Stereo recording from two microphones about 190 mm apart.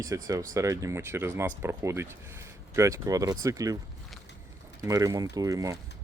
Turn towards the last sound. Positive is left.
turn(degrees=-20)  # may be behind; listen again after turning